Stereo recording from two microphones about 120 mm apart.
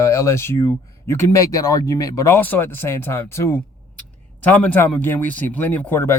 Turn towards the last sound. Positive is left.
turn(degrees=20)  # may be behind; listen again after turning